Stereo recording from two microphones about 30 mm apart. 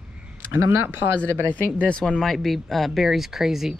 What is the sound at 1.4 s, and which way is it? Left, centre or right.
Speech, left.